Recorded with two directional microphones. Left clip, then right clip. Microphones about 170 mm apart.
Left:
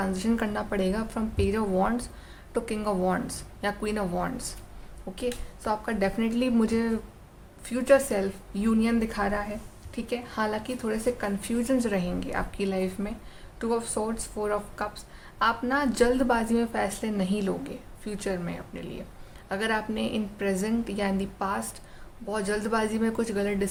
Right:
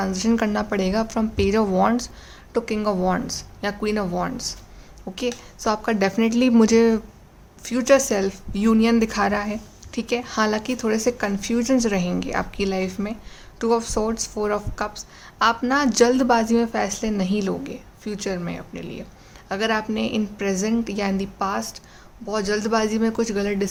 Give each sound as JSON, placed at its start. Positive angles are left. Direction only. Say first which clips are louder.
{"t": 0.0, "sound": "speech", "louder": "right 6 dB", "side_deg": -30}
{"t": 2.5, "sound": "speech", "louder": "right 6 dB", "side_deg": -25}
{"t": 5.1, "sound": "speech", "louder": "right 5 dB", "side_deg": -40}